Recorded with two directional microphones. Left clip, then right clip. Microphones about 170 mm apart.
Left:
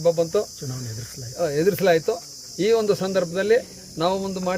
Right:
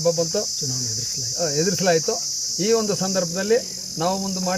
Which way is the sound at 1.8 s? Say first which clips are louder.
Left 1 dB; 30° left (ahead or behind).